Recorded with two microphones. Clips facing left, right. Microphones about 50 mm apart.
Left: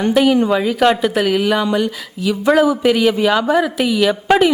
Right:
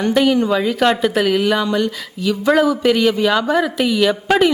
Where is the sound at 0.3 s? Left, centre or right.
Centre.